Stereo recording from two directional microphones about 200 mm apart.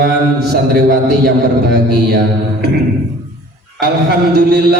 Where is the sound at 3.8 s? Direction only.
55° right (ahead or behind).